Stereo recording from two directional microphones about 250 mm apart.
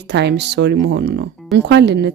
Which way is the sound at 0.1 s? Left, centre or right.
Right.